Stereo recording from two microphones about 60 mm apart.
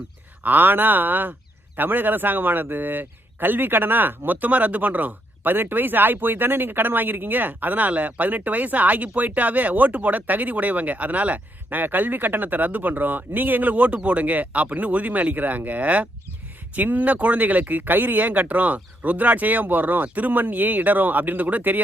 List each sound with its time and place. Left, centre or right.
0.4 s speech: right